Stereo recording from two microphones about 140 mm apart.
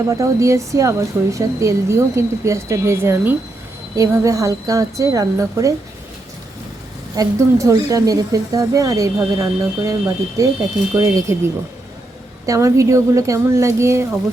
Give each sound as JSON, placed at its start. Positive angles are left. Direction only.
{"t": 0.1, "sound": "a woman's voice", "side_deg": -20}
{"t": 7.2, "sound": "a woman's voice", "side_deg": -25}
{"t": 12.5, "sound": "a woman's voice", "side_deg": -20}